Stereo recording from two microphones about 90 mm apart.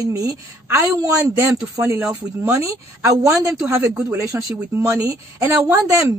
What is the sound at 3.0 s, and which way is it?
A woman's voice, 40° right (ahead or behind).